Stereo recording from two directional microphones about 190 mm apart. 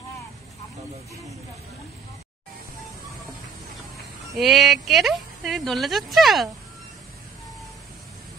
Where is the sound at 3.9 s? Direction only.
Centre (ahead or behind).